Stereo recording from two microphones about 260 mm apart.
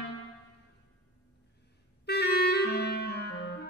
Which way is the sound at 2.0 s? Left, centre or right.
Left.